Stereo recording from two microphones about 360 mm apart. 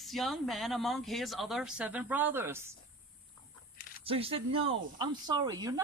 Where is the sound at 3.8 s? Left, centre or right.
Left.